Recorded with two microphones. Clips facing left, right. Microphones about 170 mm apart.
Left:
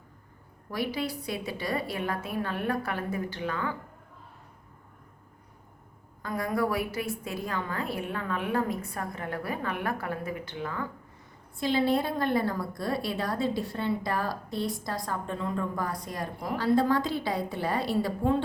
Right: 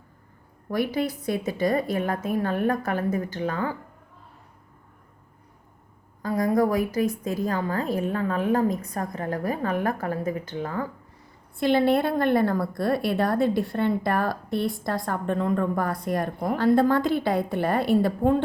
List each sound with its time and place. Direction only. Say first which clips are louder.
0.7 s a woman's voice: right 6 dB; 50° right (ahead or behind)
6.2 s a woman's voice: right 7 dB; 35° right (ahead or behind)
11.6 s a woman's voice: right 5 dB; 60° right (ahead or behind)